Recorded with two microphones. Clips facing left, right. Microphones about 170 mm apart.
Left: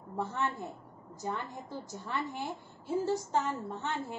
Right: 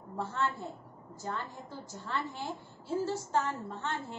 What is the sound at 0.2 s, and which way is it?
A woman's voice, 15° left (ahead or behind).